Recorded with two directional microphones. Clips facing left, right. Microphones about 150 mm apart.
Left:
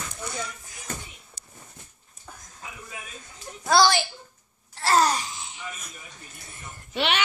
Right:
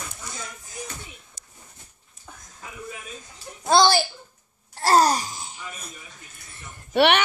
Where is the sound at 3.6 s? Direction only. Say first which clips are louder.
Right 2 dB; 25° right (ahead or behind).